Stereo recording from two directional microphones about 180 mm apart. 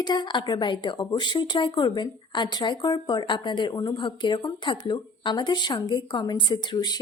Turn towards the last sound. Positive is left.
turn(degrees=25)  # may be behind; listen again after turning